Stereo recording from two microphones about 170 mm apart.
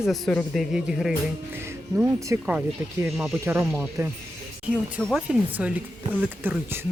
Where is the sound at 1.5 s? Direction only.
15° right (ahead or behind).